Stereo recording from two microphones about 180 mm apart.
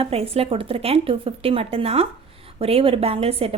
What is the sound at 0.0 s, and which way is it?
A woman's voice, 35° right (ahead or behind).